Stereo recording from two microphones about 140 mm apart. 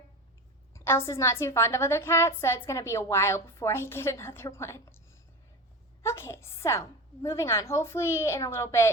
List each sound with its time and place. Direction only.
0.7 s a woman's voice: 20° left (ahead or behind)
6.0 s a woman's voice: 20° left (ahead or behind)